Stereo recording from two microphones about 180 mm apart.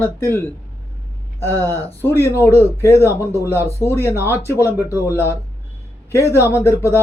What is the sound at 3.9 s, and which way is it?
Speech, 15° left (ahead or behind).